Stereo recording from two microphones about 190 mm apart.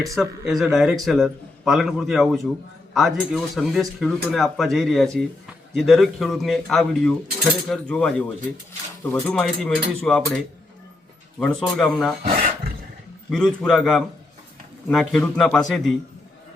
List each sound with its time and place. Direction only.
0.2 s speech: centre (ahead or behind)
11.3 s speech: centre (ahead or behind)
12.2 s roar: 45° right (ahead or behind)
13.3 s speech: 5° left (ahead or behind)
15.1 s speech: 5° left (ahead or behind)